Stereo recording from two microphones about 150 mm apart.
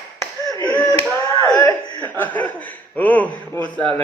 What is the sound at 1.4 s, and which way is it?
Chuckle, 20° left (ahead or behind).